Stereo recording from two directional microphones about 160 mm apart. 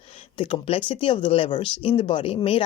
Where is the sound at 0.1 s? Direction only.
35° left (ahead or behind).